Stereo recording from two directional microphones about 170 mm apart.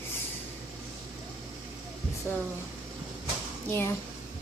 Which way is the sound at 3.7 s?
15° left (ahead or behind).